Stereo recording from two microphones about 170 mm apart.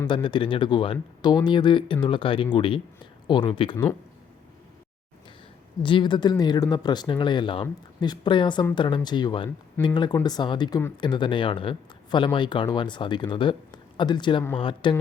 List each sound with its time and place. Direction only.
0.1 s speech: 30° left (ahead or behind)
5.8 s a man's voice: 30° left (ahead or behind)